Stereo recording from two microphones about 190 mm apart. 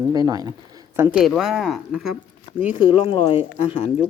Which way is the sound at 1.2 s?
Centre (ahead or behind).